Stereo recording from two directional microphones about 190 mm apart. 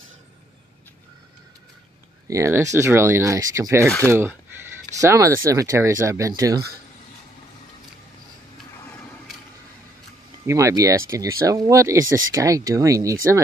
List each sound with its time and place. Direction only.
2.2 s speech: 15° right (ahead or behind)
10.4 s speech: 15° right (ahead or behind)